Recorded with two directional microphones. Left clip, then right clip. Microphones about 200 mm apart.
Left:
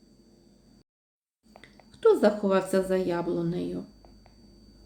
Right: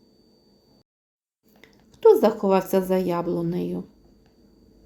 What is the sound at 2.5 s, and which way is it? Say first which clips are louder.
A woman's voice: right 4 dB; 20° right (ahead or behind).